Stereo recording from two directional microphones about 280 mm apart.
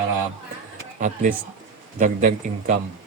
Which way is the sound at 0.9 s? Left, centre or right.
Right.